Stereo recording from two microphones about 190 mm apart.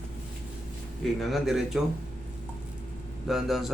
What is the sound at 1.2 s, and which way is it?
Speech, centre (ahead or behind).